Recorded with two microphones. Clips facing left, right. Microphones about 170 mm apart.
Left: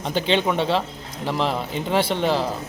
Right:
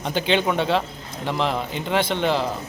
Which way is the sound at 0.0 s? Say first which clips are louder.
Even; centre (ahead or behind).